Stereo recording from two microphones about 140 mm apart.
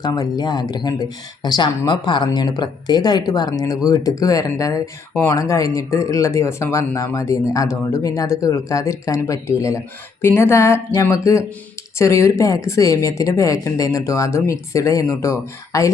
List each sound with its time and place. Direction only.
0.0 s speech: 30° left (ahead or behind)